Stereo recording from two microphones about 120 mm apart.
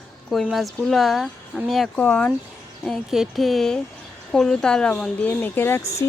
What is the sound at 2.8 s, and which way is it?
Speech, centre (ahead or behind).